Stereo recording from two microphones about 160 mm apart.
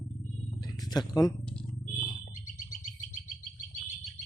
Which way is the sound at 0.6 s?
25° left (ahead or behind).